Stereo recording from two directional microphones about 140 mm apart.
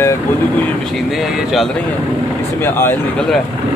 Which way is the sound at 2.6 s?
15° left (ahead or behind).